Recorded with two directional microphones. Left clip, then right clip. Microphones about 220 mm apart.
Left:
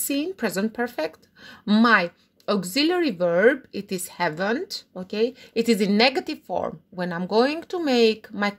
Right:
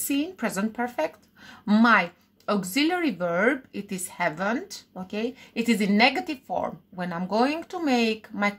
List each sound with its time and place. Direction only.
0.0 s speech: 45° left (ahead or behind)